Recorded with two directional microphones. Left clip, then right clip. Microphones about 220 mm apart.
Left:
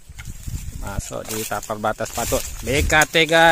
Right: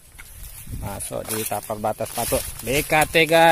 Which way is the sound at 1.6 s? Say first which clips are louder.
Left 2 dB; 15° left (ahead or behind).